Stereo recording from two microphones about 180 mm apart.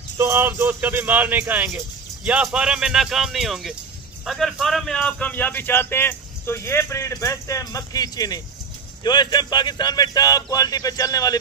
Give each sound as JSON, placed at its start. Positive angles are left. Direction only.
{"t": 0.2, "sound": "speech", "side_deg": -15}